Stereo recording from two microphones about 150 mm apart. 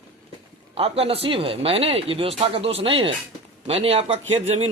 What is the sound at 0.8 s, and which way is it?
A man's voice, 40° right (ahead or behind).